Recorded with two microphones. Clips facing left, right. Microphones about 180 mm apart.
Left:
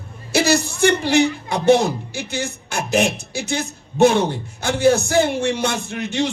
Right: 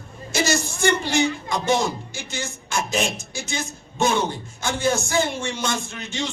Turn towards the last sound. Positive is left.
turn(degrees=60)  # may be behind; listen again after turning